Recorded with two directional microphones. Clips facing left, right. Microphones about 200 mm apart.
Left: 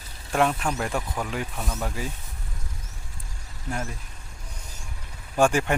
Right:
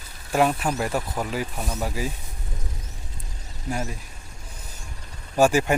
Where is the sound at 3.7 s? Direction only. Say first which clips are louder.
Right 3 dB; 15° right (ahead or behind).